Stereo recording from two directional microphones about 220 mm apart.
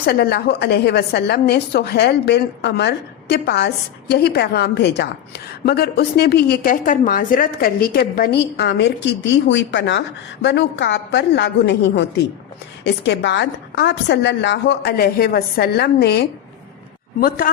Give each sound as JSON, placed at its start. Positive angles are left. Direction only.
{"t": 0.0, "sound": "a woman's voice", "side_deg": 45}